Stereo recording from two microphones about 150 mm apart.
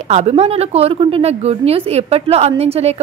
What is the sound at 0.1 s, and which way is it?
Speech, 45° right (ahead or behind).